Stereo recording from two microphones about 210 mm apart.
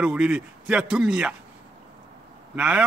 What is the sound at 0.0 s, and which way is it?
A man's voice, 5° right (ahead or behind).